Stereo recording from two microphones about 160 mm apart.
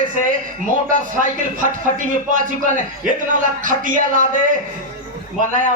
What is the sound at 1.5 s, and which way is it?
A man's voice, 55° right (ahead or behind).